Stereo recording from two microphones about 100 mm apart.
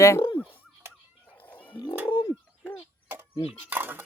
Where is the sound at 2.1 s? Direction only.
40° left (ahead or behind).